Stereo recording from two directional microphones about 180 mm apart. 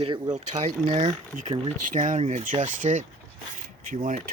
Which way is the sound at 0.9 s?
40° right (ahead or behind).